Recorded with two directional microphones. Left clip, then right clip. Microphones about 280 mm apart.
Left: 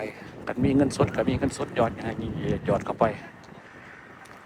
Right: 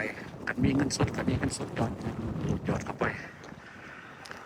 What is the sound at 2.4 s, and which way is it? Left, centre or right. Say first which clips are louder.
Speech: left 9 dB; centre.